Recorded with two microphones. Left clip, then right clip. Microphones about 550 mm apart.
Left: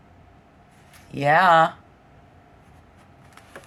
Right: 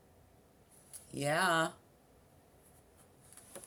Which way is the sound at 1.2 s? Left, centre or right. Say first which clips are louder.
Left 16 dB; right.